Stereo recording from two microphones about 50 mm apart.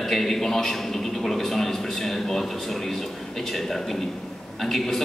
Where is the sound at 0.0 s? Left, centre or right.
Centre.